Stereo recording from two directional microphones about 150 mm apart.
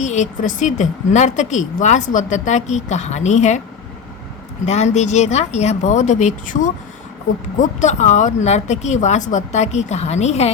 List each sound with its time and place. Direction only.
0.0 s a woman's voice: 50° left (ahead or behind)
4.6 s a woman's voice: 45° left (ahead or behind)